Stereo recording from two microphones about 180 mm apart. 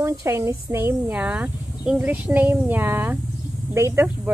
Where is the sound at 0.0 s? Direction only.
15° right (ahead or behind).